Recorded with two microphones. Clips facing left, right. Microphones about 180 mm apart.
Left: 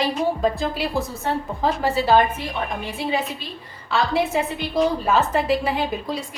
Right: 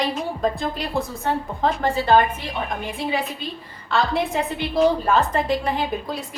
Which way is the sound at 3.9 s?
Centre (ahead or behind).